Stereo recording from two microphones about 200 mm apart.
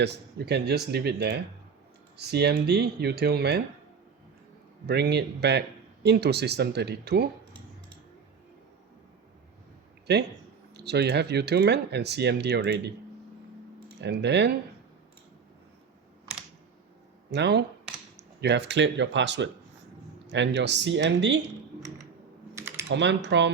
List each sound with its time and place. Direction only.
0.0 s speech: 55° right (ahead or behind)
4.9 s speech: 55° right (ahead or behind)
10.1 s speech: 55° right (ahead or behind)
14.0 s speech: 60° right (ahead or behind)
17.3 s speech: 60° right (ahead or behind)
21.8 s typing: 15° right (ahead or behind)
22.9 s speech: 60° right (ahead or behind)